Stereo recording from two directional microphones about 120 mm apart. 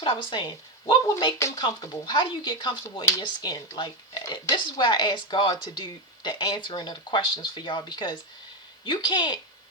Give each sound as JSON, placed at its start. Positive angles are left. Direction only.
{"t": 0.0, "sound": "speech", "side_deg": 45}
{"t": 1.0, "sound": "speech", "side_deg": 25}